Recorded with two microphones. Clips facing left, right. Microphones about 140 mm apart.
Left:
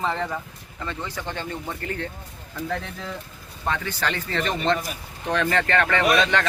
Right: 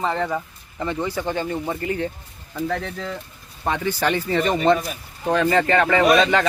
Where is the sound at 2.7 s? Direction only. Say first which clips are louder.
Right 2 dB; 5° left (ahead or behind).